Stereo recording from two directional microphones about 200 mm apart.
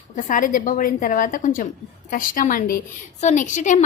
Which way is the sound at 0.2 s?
40° left (ahead or behind).